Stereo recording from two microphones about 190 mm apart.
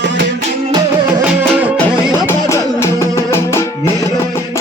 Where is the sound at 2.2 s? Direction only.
15° left (ahead or behind).